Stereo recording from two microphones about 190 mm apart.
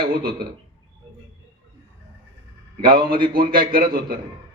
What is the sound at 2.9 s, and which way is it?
A man's voice, 50° right (ahead or behind).